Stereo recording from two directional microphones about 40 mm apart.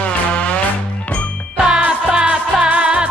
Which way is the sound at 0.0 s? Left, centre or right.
Left.